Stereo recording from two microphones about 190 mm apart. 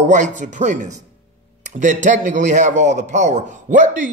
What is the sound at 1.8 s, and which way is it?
A man's voice, 40° right (ahead or behind).